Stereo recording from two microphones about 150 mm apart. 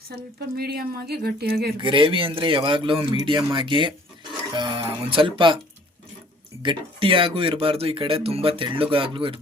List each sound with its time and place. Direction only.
0.3 s speech: 90° right
1.8 s speech: 35° right (ahead or behind)
6.6 s speech: 35° right (ahead or behind)